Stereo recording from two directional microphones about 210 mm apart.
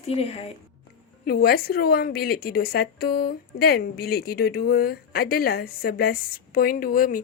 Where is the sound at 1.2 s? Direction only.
45° left (ahead or behind).